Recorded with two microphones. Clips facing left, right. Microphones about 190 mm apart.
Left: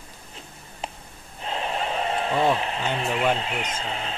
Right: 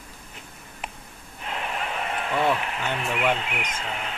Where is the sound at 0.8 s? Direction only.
30° left (ahead or behind).